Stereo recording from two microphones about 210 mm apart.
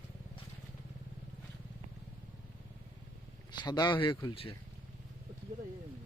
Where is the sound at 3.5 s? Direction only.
20° left (ahead or behind).